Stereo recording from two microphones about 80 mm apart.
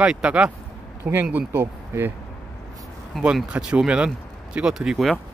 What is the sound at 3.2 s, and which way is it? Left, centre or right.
Speech, centre.